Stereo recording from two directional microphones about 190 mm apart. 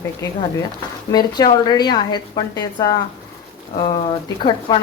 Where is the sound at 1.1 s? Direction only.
20° left (ahead or behind).